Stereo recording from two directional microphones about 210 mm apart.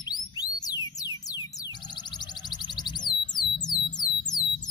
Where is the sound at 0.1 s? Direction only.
20° left (ahead or behind).